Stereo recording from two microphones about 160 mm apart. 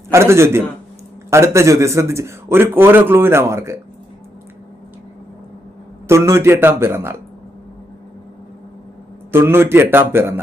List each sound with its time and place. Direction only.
0.1 s a man's voice: 15° right (ahead or behind)
6.1 s a man's voice: 15° right (ahead or behind)
9.3 s a man's voice: 15° right (ahead or behind)